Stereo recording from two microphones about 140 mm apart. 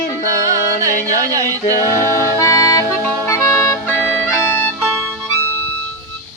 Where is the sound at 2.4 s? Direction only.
20° left (ahead or behind).